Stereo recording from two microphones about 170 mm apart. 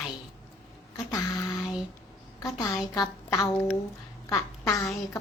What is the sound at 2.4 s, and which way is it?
A woman's voice, 20° left (ahead or behind).